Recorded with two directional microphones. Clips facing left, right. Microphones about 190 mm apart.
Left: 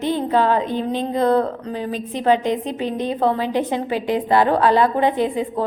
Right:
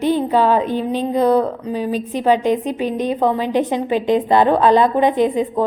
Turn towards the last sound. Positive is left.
turn(degrees=-20)  # may be behind; listen again after turning